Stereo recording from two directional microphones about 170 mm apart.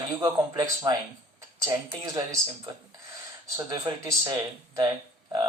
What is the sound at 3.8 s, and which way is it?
Speech, 20° right (ahead or behind).